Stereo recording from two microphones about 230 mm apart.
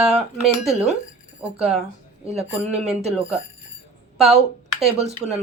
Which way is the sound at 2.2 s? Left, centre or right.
Right.